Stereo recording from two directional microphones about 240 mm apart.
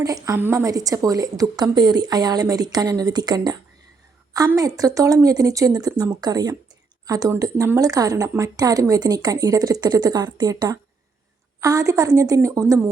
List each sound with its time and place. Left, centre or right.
0.0 s a woman's voice: centre